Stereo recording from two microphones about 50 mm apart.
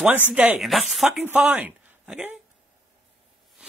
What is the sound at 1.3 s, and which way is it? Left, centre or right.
Speech, centre.